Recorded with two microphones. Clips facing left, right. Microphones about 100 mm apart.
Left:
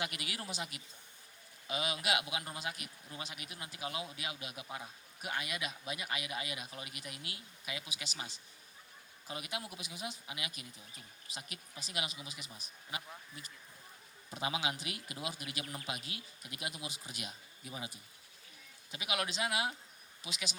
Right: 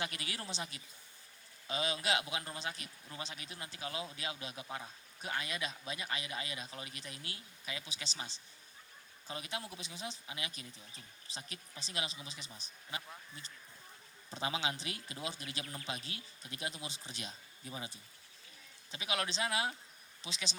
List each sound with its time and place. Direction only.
0.0 s speech: 30° right (ahead or behind)
14.3 s a man's voice: 30° right (ahead or behind)